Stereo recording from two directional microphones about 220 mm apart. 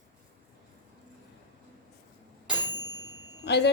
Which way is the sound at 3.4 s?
50° left (ahead or behind).